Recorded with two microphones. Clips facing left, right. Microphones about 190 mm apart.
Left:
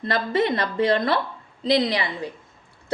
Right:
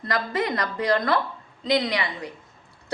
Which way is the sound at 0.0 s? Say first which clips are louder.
Left 4 dB; 25° left (ahead or behind).